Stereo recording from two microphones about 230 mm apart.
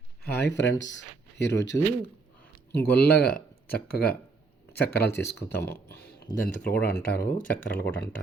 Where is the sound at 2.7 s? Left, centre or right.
Left.